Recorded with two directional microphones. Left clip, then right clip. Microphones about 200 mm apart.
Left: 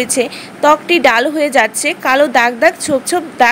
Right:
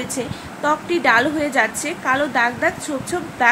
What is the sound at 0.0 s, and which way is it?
A woman's voice, 45° left (ahead or behind).